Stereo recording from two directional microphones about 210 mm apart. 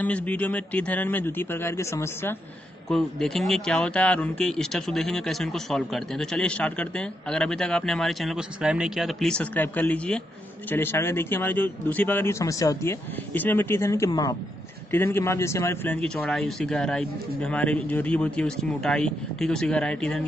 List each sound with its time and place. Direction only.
0.0 s speech: 5° left (ahead or behind)
2.9 s speech: centre (ahead or behind)